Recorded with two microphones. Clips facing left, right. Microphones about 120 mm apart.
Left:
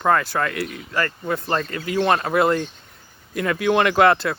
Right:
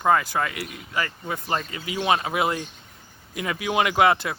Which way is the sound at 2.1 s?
50° left (ahead or behind).